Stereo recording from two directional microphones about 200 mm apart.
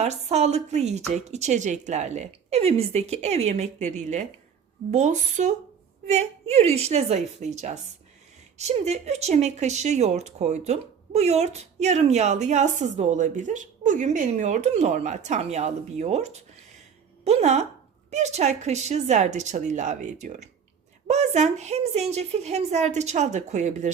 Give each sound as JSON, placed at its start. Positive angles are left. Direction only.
{"t": 0.0, "sound": "speech", "side_deg": -35}